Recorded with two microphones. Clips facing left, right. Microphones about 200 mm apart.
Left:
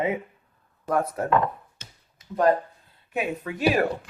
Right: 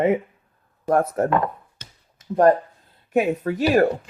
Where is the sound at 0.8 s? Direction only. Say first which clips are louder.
Right 6 dB; 45° right (ahead or behind).